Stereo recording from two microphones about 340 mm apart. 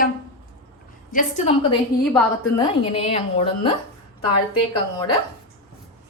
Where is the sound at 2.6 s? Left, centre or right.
Centre.